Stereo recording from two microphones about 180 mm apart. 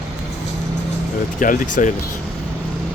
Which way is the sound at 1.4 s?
45° left (ahead or behind).